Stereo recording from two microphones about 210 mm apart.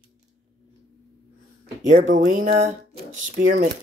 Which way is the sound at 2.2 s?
35° right (ahead or behind).